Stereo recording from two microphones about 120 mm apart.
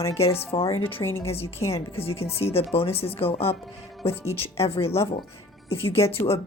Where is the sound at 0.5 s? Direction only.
45° left (ahead or behind).